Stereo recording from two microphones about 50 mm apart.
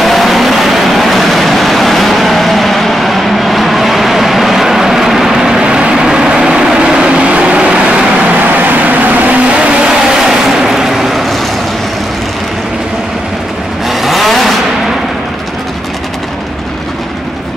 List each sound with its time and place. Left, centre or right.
0.0 s vehicle: centre; by 8.3 s right
8.5 s vehicle: right
9.8 s vehicle: centre
13.8 s vehicle: centre